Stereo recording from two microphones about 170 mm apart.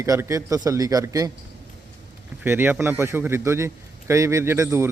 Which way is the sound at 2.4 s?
10° right (ahead or behind).